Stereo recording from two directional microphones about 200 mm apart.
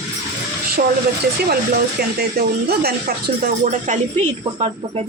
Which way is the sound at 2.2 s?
50° right (ahead or behind).